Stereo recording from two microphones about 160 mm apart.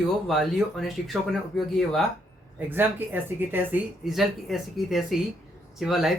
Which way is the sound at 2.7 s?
10° right (ahead or behind).